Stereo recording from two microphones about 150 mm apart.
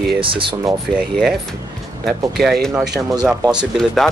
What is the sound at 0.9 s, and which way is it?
Speech, centre (ahead or behind).